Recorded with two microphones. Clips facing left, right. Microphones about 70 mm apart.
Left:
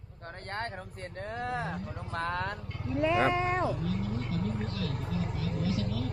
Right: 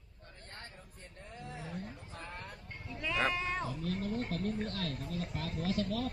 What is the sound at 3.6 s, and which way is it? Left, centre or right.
Cat, left.